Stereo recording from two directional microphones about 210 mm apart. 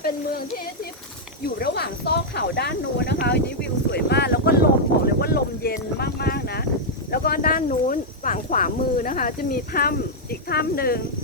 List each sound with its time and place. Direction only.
0.0 s speech: 45° left (ahead or behind)